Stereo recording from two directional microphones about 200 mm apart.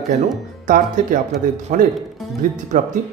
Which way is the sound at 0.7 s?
40° right (ahead or behind).